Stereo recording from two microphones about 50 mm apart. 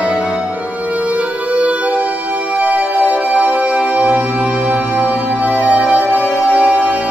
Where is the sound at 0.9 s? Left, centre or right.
Right.